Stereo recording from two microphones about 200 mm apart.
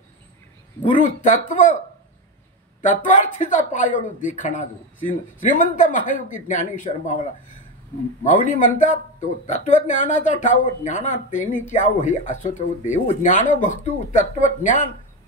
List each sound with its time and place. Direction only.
1.2 s speech: 40° left (ahead or behind)
2.8 s speech: 40° left (ahead or behind)
8.2 s speech: 40° left (ahead or behind)